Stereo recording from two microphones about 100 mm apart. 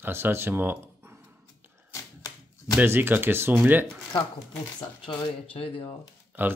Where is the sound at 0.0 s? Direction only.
25° right (ahead or behind).